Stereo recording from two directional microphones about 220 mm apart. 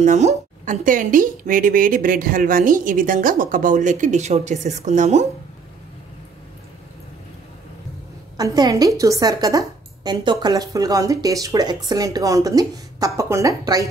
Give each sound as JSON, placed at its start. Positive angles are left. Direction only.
{"t": 0.0, "sound": "a woman's voice", "side_deg": -30}
{"t": 8.4, "sound": "a woman's voice", "side_deg": -15}